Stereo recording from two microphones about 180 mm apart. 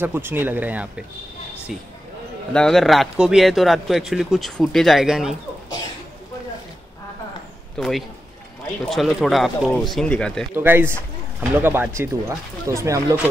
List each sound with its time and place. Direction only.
0.0 s speech: 10° right (ahead or behind)
2.5 s speech: 5° left (ahead or behind)
7.7 s speech: centre (ahead or behind)
10.5 s speech: 10° right (ahead or behind)